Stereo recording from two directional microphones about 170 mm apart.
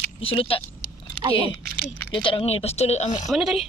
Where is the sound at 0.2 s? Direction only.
35° left (ahead or behind).